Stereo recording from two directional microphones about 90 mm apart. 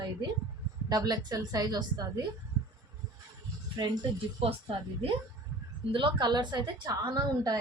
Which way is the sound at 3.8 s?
50° right (ahead or behind).